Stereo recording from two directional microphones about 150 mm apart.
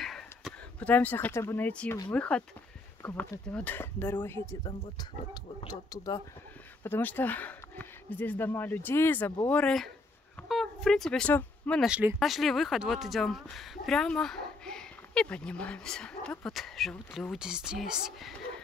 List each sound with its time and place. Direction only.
0.0 s a sound: centre (ahead or behind)
2.0 s speech: 5° left (ahead or behind)
4.6 s speech: 30° left (ahead or behind)
6.8 s speech: 15° left (ahead or behind)
11.8 s speech: 5° right (ahead or behind)